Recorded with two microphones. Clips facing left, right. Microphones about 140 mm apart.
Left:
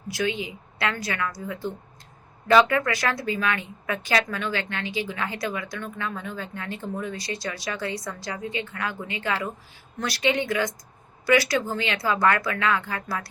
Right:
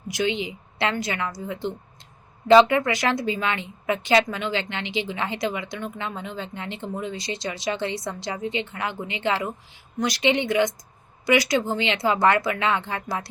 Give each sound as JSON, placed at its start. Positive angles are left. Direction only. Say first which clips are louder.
{"t": 0.1, "sound": "speech", "louder": "right 2 dB", "side_deg": -20}